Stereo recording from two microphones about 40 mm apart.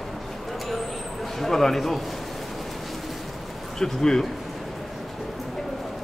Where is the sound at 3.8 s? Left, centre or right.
Centre.